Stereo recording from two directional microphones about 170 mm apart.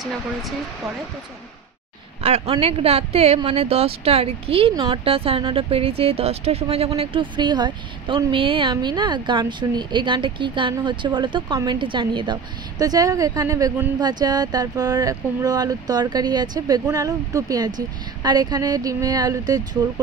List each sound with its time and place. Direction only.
0.0 s speech: centre (ahead or behind)
2.2 s speech: 40° right (ahead or behind); by 19.8 s 20° right (ahead or behind)